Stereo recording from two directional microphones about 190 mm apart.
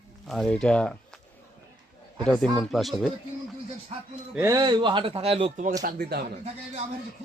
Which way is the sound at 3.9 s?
35° right (ahead or behind).